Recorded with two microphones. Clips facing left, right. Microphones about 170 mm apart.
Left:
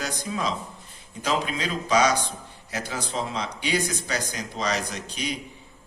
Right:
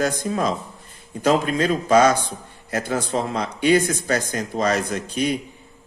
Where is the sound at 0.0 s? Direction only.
50° right (ahead or behind).